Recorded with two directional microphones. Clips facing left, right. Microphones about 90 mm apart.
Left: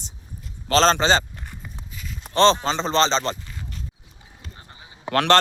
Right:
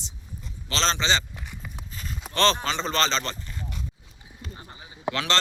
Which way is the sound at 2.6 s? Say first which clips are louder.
Left 5 dB; 30° left (ahead or behind).